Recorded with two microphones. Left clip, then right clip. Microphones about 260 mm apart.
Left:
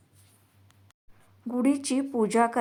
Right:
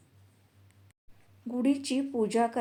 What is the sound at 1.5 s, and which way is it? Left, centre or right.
Speech, centre.